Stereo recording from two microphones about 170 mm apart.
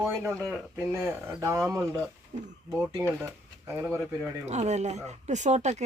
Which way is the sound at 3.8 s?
15° right (ahead or behind).